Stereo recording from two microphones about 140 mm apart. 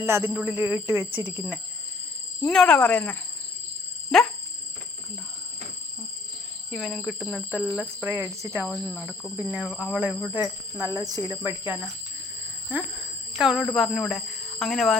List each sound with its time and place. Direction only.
0.0 s speech: 15° right (ahead or behind)
2.4 s speech: 5° left (ahead or behind)
6.7 s speech: centre (ahead or behind)
8.0 s speech: 20° right (ahead or behind)
9.6 s speech: centre (ahead or behind)
10.3 s speech: 20° right (ahead or behind)
11.3 s speech: 15° right (ahead or behind)
13.3 s speech: centre (ahead or behind)